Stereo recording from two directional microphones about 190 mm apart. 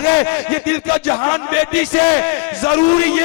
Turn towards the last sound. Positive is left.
turn(degrees=15)  # may be behind; listen again after turning